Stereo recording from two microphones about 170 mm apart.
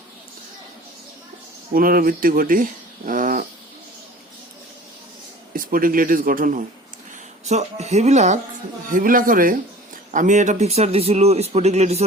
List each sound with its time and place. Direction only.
1.7 s speech: 60° right (ahead or behind)
3.1 s wild animals: 55° right (ahead or behind)
5.5 s speech: 55° right (ahead or behind)
7.4 s speech: 40° right (ahead or behind)
8.9 s speech: 55° right (ahead or behind)